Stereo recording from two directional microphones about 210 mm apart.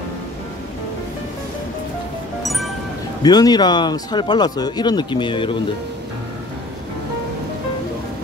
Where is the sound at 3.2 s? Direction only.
20° left (ahead or behind).